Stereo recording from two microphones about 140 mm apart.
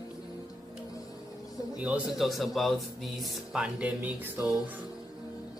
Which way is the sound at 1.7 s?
10° right (ahead or behind).